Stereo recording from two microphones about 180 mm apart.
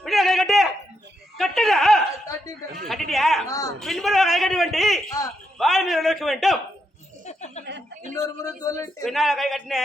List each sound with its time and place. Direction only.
0.0 s a sound: centre (ahead or behind)
5.0 s a sound: 20° left (ahead or behind)
5.5 s a man's voice: centre (ahead or behind)
7.3 s chuckle: 40° left (ahead or behind)
8.4 s speech: 20° left (ahead or behind)
9.0 s speech: centre (ahead or behind)